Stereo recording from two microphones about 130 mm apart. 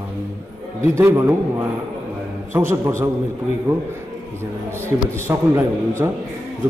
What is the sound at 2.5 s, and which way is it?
Speech, 20° right (ahead or behind).